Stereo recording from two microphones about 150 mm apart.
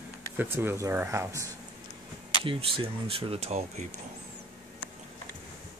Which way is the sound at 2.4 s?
35° right (ahead or behind).